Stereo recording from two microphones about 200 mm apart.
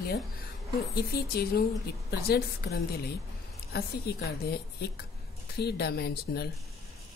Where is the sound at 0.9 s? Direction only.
50° left (ahead or behind).